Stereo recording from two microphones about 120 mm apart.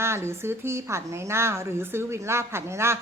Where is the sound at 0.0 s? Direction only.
20° right (ahead or behind).